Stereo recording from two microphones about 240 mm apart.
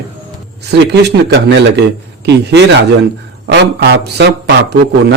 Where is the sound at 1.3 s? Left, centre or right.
Right.